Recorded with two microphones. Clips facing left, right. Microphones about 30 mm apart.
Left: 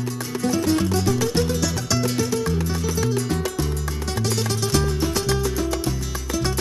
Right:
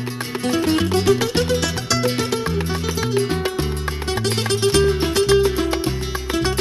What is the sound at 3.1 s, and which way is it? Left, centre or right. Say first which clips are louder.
Music: right 4 dB; right.